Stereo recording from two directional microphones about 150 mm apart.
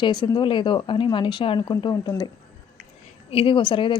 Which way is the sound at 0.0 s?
30° left (ahead or behind).